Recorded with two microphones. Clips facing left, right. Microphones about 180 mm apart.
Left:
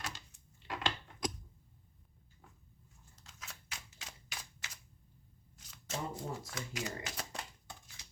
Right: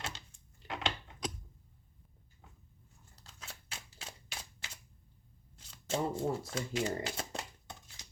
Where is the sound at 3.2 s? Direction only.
35° right (ahead or behind).